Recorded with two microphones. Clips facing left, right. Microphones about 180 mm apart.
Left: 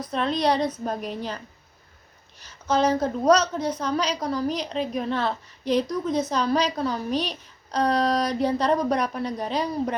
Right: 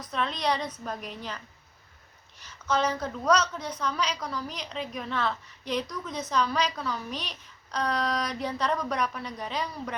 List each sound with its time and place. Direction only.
0.0 s a woman's voice: 35° left (ahead or behind)
2.4 s a woman's voice: 35° left (ahead or behind)